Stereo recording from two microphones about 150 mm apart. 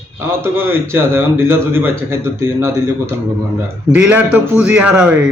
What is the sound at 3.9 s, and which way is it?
A man's voice, 10° right (ahead or behind).